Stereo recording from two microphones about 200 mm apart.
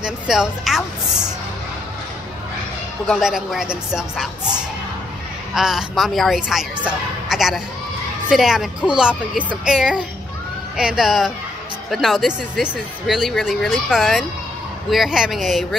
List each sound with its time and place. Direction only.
0.0 s a woman's voice: 5° right (ahead or behind)
3.1 s speech: centre (ahead or behind)
5.5 s speech: centre (ahead or behind)